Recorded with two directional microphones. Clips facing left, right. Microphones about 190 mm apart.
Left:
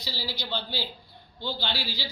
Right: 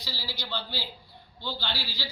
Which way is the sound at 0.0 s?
15° left (ahead or behind).